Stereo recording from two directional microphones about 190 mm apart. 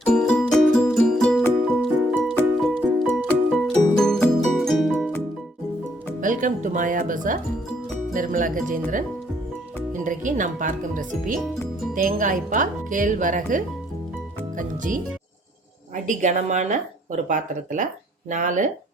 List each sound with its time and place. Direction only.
0.0 s music: 5° left (ahead or behind)
6.2 s speech: 45° right (ahead or behind)
14.6 s speech: 45° right (ahead or behind)
16.0 s speech: 40° right (ahead or behind)